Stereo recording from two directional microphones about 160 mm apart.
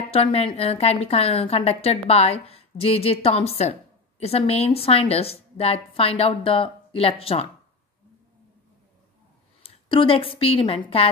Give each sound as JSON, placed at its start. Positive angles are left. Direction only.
{"t": 0.1, "sound": "a woman's voice", "side_deg": 40}
{"t": 9.6, "sound": "a woman's voice", "side_deg": 35}